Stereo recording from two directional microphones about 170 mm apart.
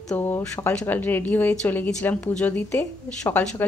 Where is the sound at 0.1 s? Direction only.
10° left (ahead or behind).